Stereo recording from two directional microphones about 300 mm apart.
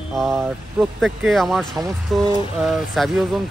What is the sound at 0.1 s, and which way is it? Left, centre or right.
Speech, centre.